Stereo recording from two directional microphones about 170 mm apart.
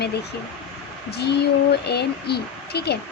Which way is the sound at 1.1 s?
75° left (ahead or behind).